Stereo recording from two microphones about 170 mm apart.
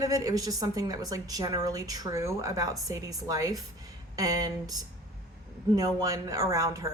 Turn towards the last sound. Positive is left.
turn(degrees=-20)  # may be behind; listen again after turning